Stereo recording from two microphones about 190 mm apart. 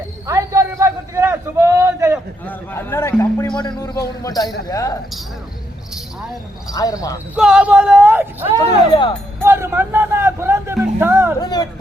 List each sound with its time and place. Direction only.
0.3 s a sound: 15° right (ahead or behind)
2.5 s a man's voice: 15° left (ahead or behind)
6.7 s speech: 20° left (ahead or behind)
7.3 s speech: 5° right (ahead or behind)
8.9 s a man's voice: 25° left (ahead or behind)
9.4 s music: 10° right (ahead or behind)
11.3 s speech: 20° left (ahead or behind)